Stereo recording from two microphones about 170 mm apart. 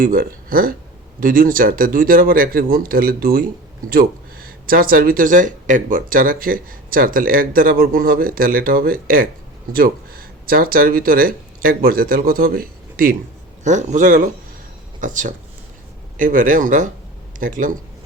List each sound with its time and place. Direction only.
0.0 s speech: 60° right (ahead or behind)
13.7 s a man's voice: 45° right (ahead or behind)